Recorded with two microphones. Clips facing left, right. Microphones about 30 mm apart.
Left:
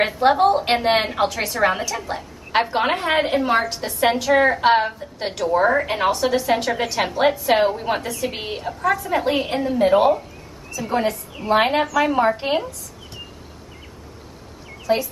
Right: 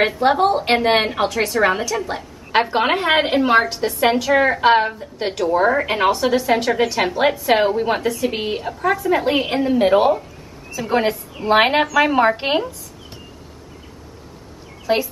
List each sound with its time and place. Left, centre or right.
0.0 s a woman's voice: centre
3.1 s a woman's voice: right
3.6 s a woman's voice: centre
9.9 s a woman's voice: centre
10.7 s a woman's voice: right
14.9 s speech: right